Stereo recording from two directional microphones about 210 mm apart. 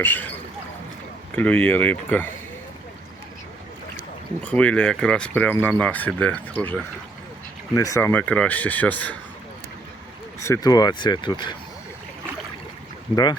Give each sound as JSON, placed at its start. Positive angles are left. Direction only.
{"t": 0.0, "sound": "speech", "side_deg": 10}
{"t": 4.4, "sound": "speech", "side_deg": 5}
{"t": 10.4, "sound": "speech", "side_deg": 15}